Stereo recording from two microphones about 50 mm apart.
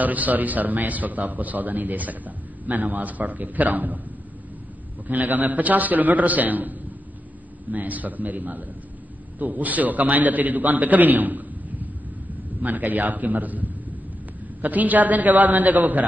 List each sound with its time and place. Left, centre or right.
0.0 s a man's voice: right
5.0 s a man's voice: right